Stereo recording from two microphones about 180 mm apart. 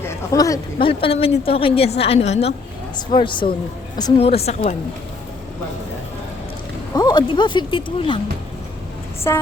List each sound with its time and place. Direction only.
0.0 s speech: 20° left (ahead or behind)
0.9 s a woman's voice: 30° left (ahead or behind)
3.1 s a woman's voice: 25° left (ahead or behind)
6.9 s speech: 20° left (ahead or behind)
9.3 s a sound: 15° left (ahead or behind)